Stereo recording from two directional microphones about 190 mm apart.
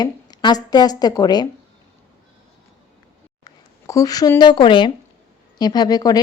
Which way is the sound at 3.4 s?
20° left (ahead or behind).